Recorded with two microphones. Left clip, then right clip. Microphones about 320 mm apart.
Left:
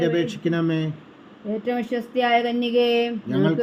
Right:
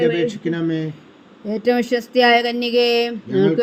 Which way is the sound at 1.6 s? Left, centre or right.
Right.